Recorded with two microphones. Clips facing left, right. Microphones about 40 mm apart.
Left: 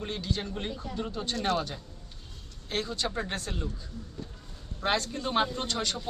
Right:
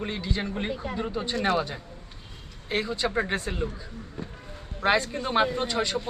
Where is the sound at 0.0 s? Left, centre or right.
Centre.